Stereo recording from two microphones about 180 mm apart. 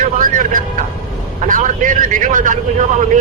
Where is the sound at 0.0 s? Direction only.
50° right (ahead or behind).